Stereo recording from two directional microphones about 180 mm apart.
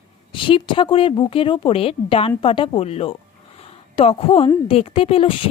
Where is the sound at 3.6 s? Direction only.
35° left (ahead or behind).